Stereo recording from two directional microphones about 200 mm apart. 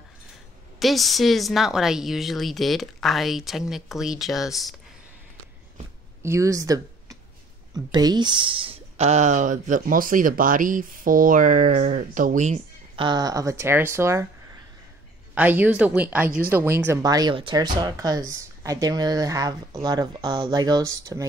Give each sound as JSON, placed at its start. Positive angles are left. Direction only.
{"t": 0.7, "sound": "a woman's voice", "side_deg": 0}
{"t": 6.2, "sound": "speech", "side_deg": -15}
{"t": 13.0, "sound": "speech", "side_deg": -20}
{"t": 15.3, "sound": "speech", "side_deg": -10}